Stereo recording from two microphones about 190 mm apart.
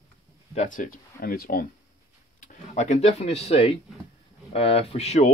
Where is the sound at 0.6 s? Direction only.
45° left (ahead or behind).